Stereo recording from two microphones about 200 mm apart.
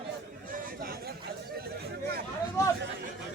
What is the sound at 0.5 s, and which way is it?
Chatter, 45° right (ahead or behind).